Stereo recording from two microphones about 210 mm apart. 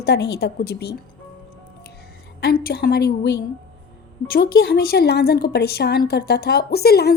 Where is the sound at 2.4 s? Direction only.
45° left (ahead or behind).